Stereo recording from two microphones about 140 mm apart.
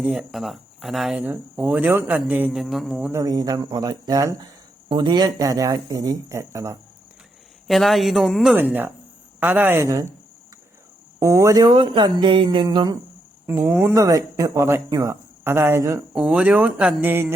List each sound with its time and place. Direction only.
0.0 s speech: 5° right (ahead or behind)
3.1 s speech: 25° right (ahead or behind)
7.7 s speech: centre (ahead or behind)
8.5 s speech: 15° right (ahead or behind)
11.2 s speech: 25° right (ahead or behind)
13.5 s speech: 20° right (ahead or behind)
16.1 s speech: 5° right (ahead or behind)